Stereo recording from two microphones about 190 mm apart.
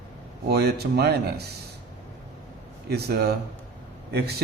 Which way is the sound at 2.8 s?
55° right (ahead or behind).